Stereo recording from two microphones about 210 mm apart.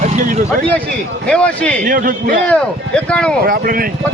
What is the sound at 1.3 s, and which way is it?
Speech, 5° left (ahead or behind).